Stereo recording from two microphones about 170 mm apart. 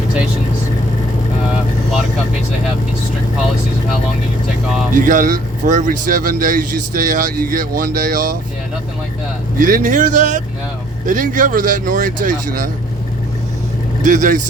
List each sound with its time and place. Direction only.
4.9 s speech: 55° right (ahead or behind)
9.6 s speech: 55° right (ahead or behind)
14.0 s speech: 45° right (ahead or behind)